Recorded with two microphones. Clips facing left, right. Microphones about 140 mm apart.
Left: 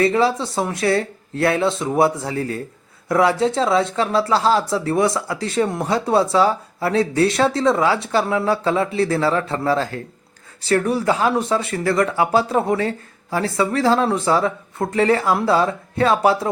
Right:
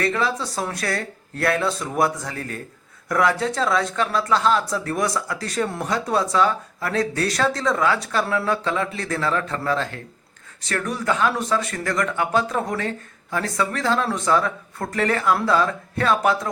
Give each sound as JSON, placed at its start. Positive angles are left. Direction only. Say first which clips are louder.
{"t": 0.0, "sound": "speech", "louder": "left 6 dB", "side_deg": 30}
{"t": 8.4, "sound": "speech", "louder": "left 4 dB", "side_deg": 30}